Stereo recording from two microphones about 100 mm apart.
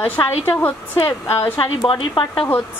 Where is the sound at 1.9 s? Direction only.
55° left (ahead or behind).